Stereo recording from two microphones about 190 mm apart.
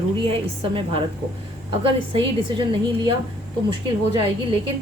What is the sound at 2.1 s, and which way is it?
A woman's voice, 25° right (ahead or behind).